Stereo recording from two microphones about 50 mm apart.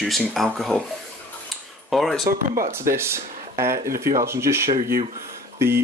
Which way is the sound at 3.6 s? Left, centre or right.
Right.